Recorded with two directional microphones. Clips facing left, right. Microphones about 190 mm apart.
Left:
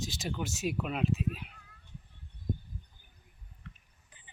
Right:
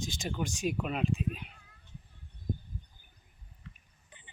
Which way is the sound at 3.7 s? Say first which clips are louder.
Left 1 dB; 55° left (ahead or behind).